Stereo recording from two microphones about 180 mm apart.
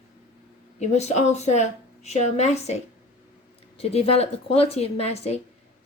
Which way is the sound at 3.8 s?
35° left (ahead or behind).